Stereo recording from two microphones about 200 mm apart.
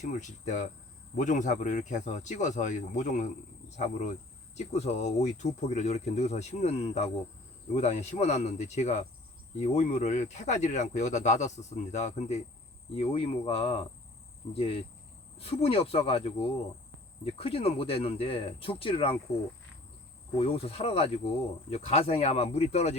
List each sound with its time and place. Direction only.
0.0 s speech: 35° left (ahead or behind)
20.4 s speech: 30° left (ahead or behind)